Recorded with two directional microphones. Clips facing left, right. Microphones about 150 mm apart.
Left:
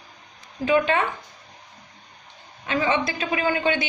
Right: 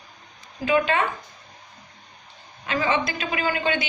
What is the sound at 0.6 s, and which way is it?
Speech, 30° left (ahead or behind).